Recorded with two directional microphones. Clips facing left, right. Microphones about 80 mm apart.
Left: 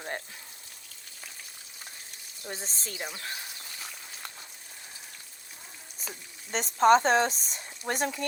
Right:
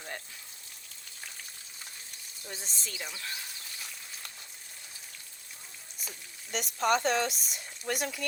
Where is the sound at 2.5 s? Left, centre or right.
Left.